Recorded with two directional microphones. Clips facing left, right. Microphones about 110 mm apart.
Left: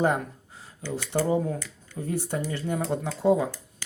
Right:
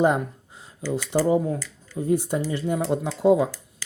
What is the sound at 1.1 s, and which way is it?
Speech, 20° right (ahead or behind).